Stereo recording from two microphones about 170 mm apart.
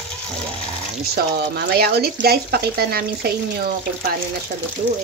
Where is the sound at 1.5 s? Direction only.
65° right (ahead or behind).